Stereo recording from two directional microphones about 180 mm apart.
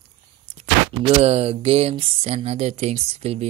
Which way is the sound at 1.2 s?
35° right (ahead or behind).